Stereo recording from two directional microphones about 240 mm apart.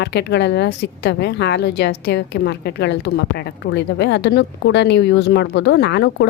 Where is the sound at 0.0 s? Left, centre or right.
Left.